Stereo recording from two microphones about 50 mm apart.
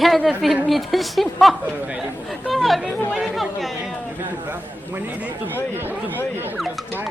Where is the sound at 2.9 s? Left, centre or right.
Left.